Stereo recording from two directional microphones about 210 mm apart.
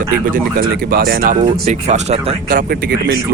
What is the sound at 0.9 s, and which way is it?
Speech, 45° right (ahead or behind).